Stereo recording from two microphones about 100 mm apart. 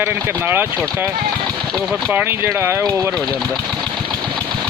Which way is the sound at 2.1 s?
25° right (ahead or behind).